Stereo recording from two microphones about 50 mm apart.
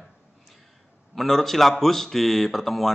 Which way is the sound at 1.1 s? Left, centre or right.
Centre.